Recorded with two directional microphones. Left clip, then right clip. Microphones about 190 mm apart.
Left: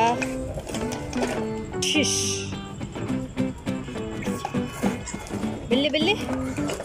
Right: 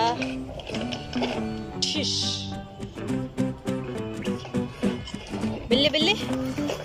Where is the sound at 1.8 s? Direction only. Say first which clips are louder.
Left 3 dB; 10° left (ahead or behind).